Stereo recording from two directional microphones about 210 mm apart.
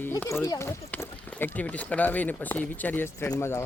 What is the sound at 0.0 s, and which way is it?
Speech, 10° left (ahead or behind).